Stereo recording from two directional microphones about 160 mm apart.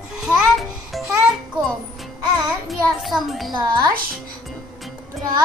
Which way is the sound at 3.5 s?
25° right (ahead or behind).